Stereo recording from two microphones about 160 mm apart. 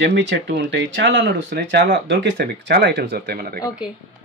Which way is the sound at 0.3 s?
90° right.